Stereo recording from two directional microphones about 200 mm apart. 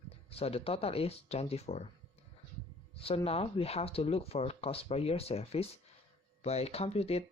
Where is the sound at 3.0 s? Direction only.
30° left (ahead or behind).